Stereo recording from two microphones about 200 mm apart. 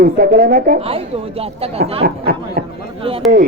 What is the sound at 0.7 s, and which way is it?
Speech, 30° right (ahead or behind).